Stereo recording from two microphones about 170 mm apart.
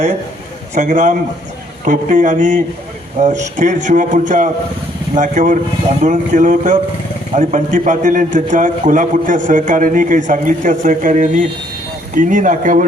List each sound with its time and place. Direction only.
0.7 s a man's voice: 45° right (ahead or behind)